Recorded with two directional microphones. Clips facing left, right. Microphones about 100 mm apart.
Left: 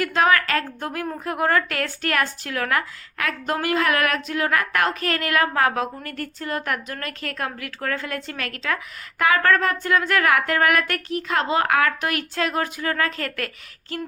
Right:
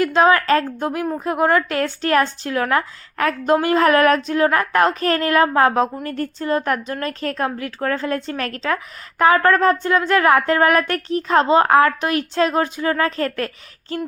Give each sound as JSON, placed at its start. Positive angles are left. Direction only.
{"t": 0.0, "sound": "speech", "side_deg": -25}